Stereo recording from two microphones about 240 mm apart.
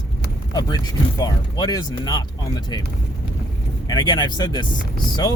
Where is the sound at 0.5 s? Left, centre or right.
Centre.